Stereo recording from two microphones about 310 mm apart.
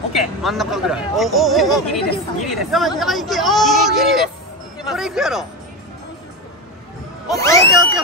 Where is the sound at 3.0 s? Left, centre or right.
Centre.